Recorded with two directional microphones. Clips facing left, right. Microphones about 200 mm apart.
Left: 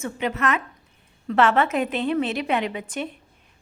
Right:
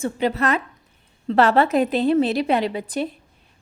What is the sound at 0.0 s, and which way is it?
A woman's voice, 35° right (ahead or behind).